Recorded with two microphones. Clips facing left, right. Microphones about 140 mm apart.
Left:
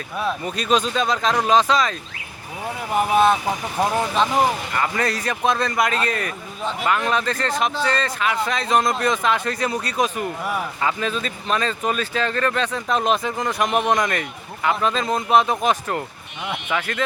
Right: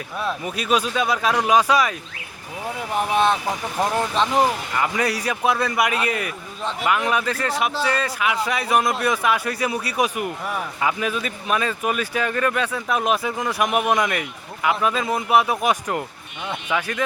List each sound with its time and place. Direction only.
0.2 s speech: 5° right (ahead or behind)
2.9 s speech: 5° left (ahead or behind)
4.8 s speech: 10° right (ahead or behind)